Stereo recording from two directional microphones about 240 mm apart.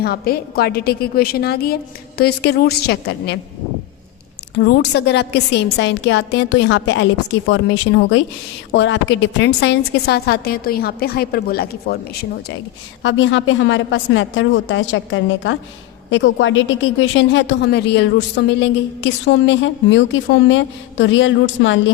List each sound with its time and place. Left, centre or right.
0.0 s a woman's voice: left
4.5 s a woman's voice: left
13.0 s a woman's voice: left